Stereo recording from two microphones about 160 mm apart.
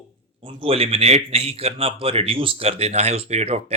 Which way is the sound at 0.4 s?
35° right (ahead or behind).